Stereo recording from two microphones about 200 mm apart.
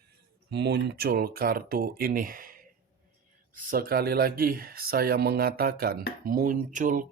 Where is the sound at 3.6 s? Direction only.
45° right (ahead or behind).